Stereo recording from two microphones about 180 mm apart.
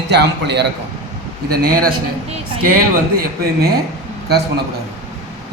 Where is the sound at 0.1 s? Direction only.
70° right (ahead or behind).